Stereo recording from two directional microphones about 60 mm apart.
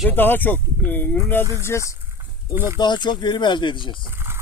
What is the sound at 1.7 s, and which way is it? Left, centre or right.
Speech, left.